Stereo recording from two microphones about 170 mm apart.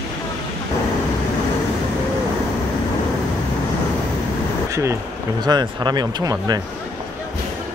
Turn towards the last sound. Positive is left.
turn(degrees=-20)  # may be behind; listen again after turning